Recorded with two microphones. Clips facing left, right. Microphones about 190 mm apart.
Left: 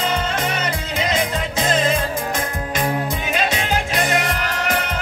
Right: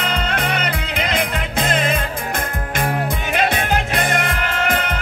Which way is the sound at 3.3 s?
60° right (ahead or behind).